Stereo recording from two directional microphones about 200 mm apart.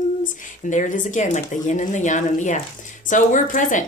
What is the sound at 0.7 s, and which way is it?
Speech, 40° left (ahead or behind).